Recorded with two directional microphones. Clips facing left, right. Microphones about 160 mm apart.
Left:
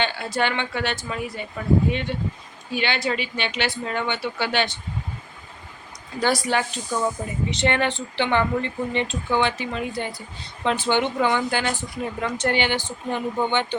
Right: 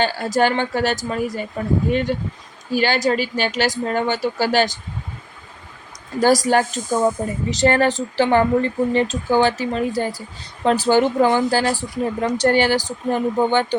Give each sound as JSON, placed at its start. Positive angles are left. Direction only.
{"t": 0.0, "sound": "speech", "side_deg": -40}
{"t": 6.1, "sound": "speech", "side_deg": -40}